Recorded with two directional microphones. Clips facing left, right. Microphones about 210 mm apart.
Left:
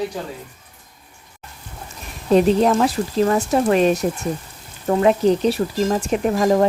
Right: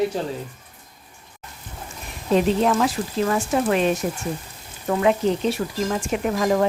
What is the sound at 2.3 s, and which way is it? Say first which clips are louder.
Speech: left 4 dB; 35° left (ahead or behind).